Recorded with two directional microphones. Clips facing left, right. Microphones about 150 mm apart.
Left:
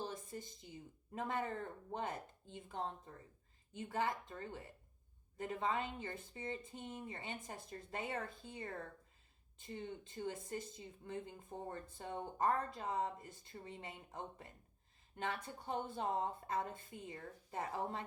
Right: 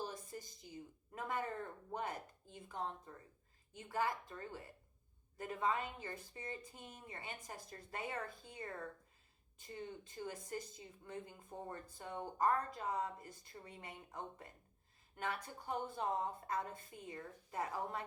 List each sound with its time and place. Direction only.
0.0 s a woman's voice: 25° left (ahead or behind)
3.7 s a woman's voice: 25° left (ahead or behind)